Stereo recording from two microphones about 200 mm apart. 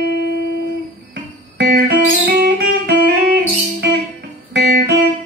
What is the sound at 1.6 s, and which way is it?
Music, 55° right (ahead or behind).